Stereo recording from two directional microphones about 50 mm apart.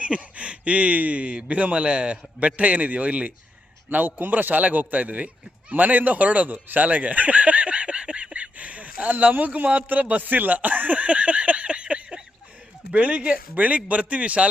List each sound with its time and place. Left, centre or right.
0.0 s speech: right
3.8 s a man's voice: right